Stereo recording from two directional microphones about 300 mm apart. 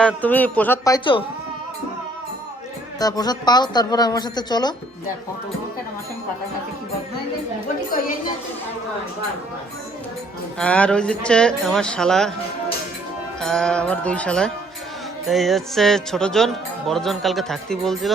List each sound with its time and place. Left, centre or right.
0.0 s speech: centre
3.0 s a woman's voice: centre
7.9 s speech: left
10.6 s speech: centre
13.4 s speech: centre